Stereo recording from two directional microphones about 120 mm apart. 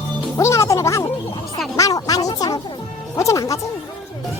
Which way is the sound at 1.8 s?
30° left (ahead or behind).